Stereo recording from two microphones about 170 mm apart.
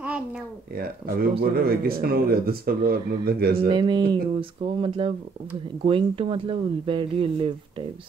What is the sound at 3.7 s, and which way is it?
Speech, 25° right (ahead or behind).